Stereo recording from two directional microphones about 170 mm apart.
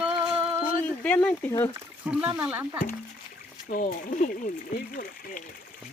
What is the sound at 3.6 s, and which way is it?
Speech, 55° left (ahead or behind).